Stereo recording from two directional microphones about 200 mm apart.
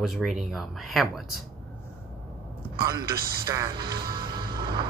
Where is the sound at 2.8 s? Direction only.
20° right (ahead or behind).